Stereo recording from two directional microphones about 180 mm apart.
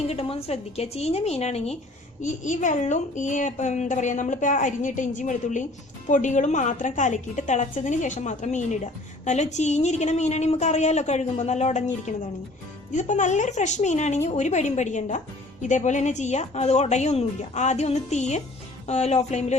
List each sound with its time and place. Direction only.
0.1 s a woman's voice: 35° left (ahead or behind)